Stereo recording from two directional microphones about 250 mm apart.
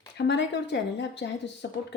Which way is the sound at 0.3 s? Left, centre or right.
Left.